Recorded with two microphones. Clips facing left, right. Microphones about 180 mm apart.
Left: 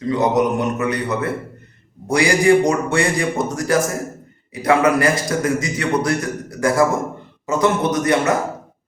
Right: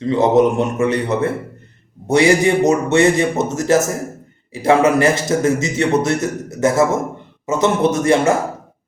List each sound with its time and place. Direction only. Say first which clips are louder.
0.1 s a man's voice: right 4 dB; 25° right (ahead or behind)